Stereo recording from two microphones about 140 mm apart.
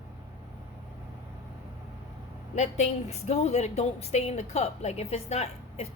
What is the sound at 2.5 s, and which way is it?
A woman's voice, 55° left (ahead or behind).